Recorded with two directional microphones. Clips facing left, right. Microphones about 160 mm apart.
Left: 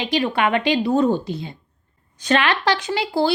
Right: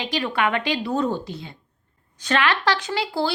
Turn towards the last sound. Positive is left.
turn(degrees=15)  # may be behind; listen again after turning